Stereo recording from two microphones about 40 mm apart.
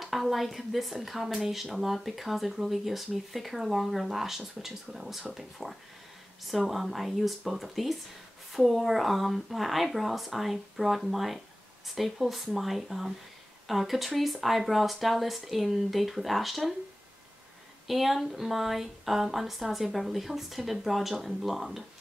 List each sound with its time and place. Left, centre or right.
0.0 s speech: centre
17.8 s speech: centre